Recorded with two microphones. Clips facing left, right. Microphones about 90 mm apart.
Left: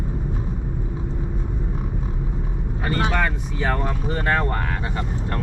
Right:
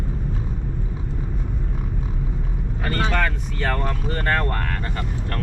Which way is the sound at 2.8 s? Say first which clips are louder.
Left 1 dB; 10° left (ahead or behind).